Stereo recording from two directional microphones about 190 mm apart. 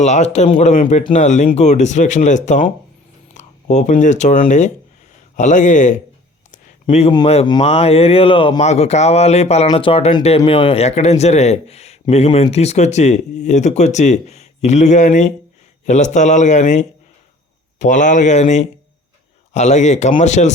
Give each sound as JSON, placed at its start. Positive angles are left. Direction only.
{"t": 0.0, "sound": "a man's voice", "side_deg": 35}